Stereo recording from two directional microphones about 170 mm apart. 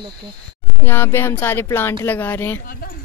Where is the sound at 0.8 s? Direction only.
15° left (ahead or behind).